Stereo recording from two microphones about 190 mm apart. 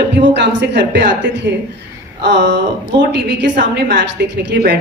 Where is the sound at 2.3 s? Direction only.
65° right (ahead or behind).